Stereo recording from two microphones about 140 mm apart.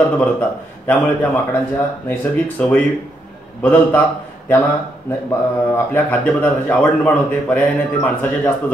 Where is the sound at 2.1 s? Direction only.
10° left (ahead or behind).